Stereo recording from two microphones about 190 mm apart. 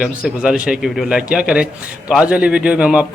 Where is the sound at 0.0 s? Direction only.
5° right (ahead or behind).